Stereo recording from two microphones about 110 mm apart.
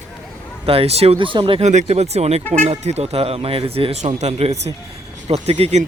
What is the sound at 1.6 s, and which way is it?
Speech, 90° right.